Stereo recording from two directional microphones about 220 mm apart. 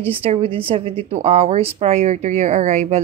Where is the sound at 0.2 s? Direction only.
25° right (ahead or behind).